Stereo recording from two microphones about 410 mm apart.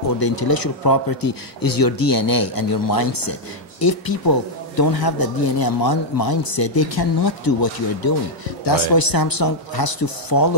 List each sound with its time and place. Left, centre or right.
0.2 s speech: left